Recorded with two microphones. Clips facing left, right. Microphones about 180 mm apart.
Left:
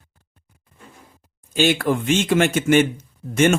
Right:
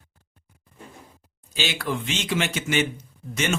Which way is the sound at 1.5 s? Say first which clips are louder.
Left 9 dB; 50° left (ahead or behind).